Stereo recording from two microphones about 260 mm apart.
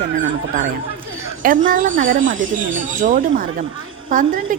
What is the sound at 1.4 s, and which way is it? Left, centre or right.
A woman's voice, right.